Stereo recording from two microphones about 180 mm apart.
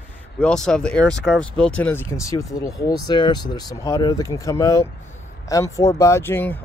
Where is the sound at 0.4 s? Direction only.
5° left (ahead or behind).